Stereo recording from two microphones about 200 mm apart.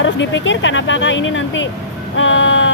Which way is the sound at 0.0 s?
70° left (ahead or behind).